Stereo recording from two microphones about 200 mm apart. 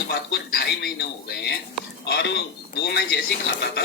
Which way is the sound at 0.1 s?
50° left (ahead or behind).